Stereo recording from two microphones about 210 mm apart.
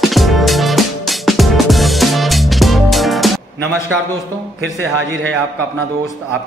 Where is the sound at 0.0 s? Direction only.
Centre (ahead or behind).